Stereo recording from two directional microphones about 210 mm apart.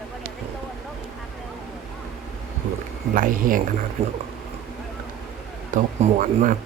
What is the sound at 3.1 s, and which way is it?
Speech, 40° right (ahead or behind).